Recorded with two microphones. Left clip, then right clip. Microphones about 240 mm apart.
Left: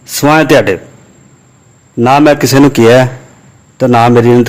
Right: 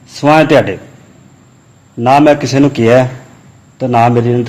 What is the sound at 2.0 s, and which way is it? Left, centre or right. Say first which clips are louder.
A man's voice: left 1 dB; left.